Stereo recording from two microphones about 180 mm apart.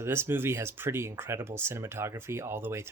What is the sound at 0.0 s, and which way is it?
Speech, 15° right (ahead or behind).